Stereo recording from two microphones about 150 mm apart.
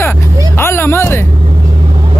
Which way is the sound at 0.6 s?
15° left (ahead or behind).